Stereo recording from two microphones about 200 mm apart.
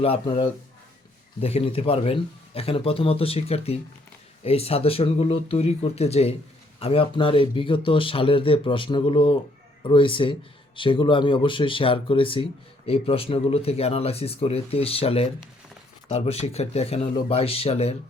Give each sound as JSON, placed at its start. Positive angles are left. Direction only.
{"t": 0.0, "sound": "speech", "side_deg": 30}